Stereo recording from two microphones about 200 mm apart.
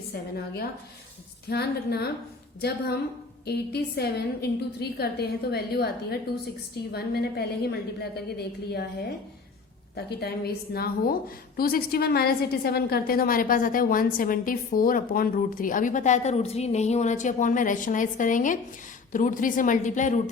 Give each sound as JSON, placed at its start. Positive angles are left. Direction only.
{"t": 0.1, "sound": "a woman's voice", "side_deg": 50}